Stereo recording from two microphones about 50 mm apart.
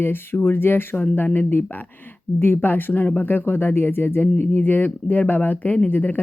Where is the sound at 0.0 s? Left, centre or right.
Left.